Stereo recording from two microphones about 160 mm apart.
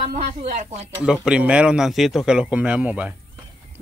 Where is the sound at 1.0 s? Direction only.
5° right (ahead or behind).